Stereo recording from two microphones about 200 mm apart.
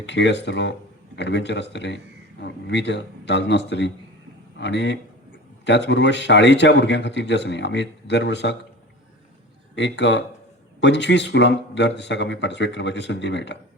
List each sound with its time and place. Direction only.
0.0 s a man's voice: 60° left (ahead or behind)
9.7 s speech: 60° left (ahead or behind)